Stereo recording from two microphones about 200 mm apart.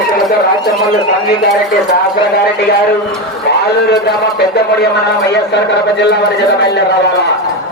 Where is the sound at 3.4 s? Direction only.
60° left (ahead or behind).